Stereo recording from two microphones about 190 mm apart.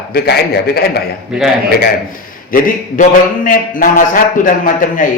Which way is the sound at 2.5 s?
45° left (ahead or behind).